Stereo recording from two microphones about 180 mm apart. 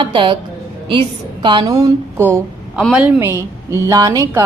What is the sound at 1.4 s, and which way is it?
A woman's voice, 25° right (ahead or behind).